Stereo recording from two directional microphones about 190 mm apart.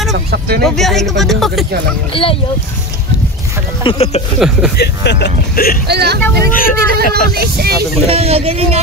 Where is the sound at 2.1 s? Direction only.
30° left (ahead or behind).